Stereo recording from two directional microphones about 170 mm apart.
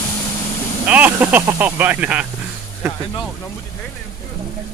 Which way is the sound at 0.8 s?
10° right (ahead or behind).